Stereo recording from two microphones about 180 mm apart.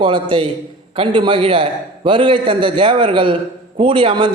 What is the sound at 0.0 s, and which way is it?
A man's voice, 25° right (ahead or behind).